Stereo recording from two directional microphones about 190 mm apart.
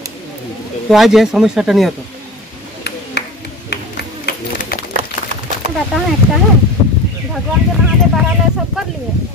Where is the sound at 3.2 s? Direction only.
60° left (ahead or behind).